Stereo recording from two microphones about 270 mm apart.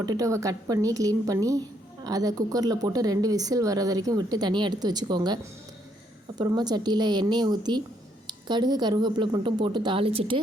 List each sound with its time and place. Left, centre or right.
0.0 s speech: centre
6.4 s speech: centre